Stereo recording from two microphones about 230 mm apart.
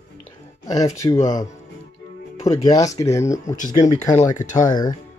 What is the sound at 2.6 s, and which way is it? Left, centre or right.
Speech, centre.